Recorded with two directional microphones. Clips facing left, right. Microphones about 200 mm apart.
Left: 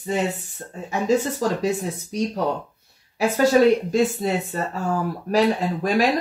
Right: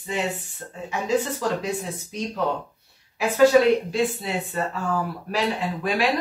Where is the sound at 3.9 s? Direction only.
45° left (ahead or behind).